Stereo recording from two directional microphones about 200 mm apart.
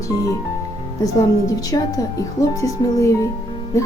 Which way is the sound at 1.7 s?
20° left (ahead or behind).